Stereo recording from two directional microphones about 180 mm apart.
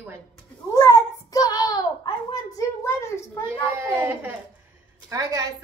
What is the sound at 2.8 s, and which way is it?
Speech, 15° left (ahead or behind).